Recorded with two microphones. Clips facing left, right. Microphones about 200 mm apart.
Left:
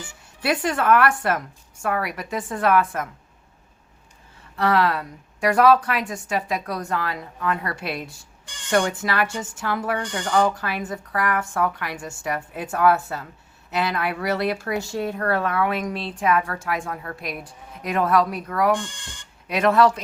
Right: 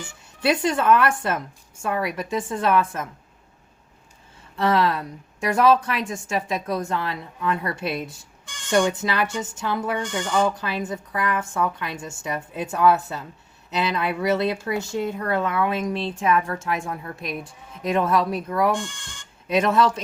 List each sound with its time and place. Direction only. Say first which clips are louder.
0.4 s a woman's voice: right 1 dB; 25° right (ahead or behind)
4.5 s a woman's voice: even; 25° right (ahead or behind)